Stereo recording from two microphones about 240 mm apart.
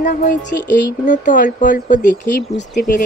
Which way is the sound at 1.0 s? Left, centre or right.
Left.